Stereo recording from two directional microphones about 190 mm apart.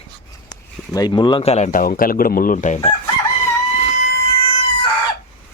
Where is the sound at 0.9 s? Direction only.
20° left (ahead or behind); by 2.9 s 40° left (ahead or behind).